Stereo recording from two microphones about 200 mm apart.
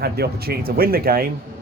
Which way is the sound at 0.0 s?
50° right (ahead or behind).